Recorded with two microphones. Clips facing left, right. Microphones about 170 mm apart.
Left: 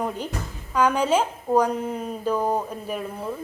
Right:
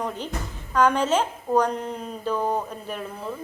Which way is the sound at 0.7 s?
10° left (ahead or behind).